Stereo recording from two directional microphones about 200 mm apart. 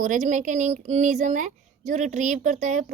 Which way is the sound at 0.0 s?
40° right (ahead or behind).